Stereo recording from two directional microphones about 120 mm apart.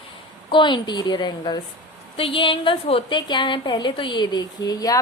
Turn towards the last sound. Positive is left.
turn(degrees=30)  # may be behind; listen again after turning